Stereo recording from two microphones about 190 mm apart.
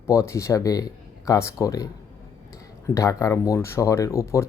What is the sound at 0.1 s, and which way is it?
Speech, 15° left (ahead or behind).